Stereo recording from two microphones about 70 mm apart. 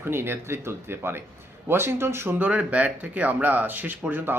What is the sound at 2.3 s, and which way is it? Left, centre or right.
A man's voice, right.